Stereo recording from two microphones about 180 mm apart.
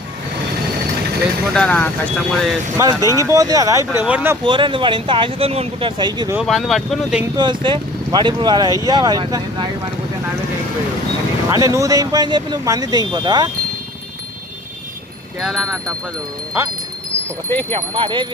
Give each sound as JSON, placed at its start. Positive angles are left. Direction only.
{"t": 1.5, "sound": "speech", "side_deg": 5}
{"t": 2.7, "sound": "speech", "side_deg": -20}
{"t": 4.4, "sound": "speech", "side_deg": -30}
{"t": 6.3, "sound": "speech", "side_deg": 0}
{"t": 7.3, "sound": "speech", "side_deg": -25}
{"t": 11.5, "sound": "speech", "side_deg": -15}
{"t": 15.4, "sound": "speech", "side_deg": 0}
{"t": 17.9, "sound": "speech", "side_deg": -25}